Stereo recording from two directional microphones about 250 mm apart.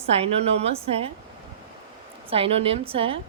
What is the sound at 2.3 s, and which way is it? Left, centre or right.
Speech, right.